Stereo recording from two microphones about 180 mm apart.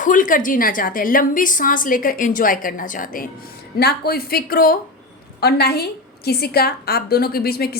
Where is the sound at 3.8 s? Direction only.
60° left (ahead or behind).